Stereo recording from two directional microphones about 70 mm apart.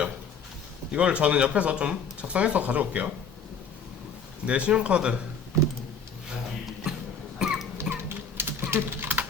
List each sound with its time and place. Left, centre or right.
0.9 s speech: centre
4.4 s speech: centre
6.2 s a sound: centre
7.3 s cough: centre
7.8 s typing: right